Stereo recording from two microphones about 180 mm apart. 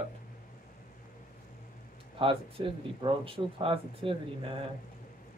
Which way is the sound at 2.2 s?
30° right (ahead or behind).